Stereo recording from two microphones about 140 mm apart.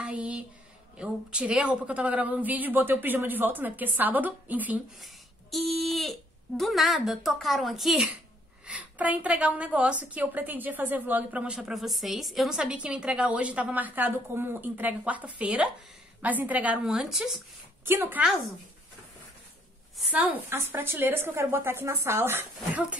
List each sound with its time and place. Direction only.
0.0 s a sound: 5° right (ahead or behind)
0.9 s a woman's voice: 5° right (ahead or behind)
5.0 s a woman's voice: centre (ahead or behind)
17.8 s a woman's voice: 15° right (ahead or behind)
20.0 s a woman's voice: 10° right (ahead or behind)